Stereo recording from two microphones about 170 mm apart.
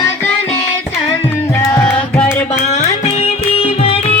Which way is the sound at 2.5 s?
40° left (ahead or behind).